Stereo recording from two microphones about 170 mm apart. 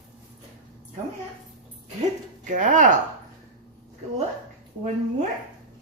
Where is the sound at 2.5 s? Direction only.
50° right (ahead or behind).